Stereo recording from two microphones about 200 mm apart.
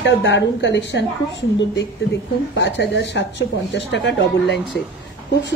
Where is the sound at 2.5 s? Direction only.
60° left (ahead or behind).